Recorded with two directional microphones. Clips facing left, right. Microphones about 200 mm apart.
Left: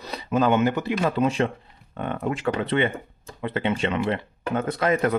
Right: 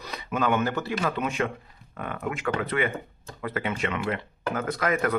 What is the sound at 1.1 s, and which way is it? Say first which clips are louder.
Speech: left 5 dB; 30° left (ahead or behind).